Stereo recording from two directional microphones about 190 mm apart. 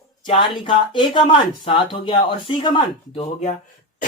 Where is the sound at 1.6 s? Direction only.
25° left (ahead or behind).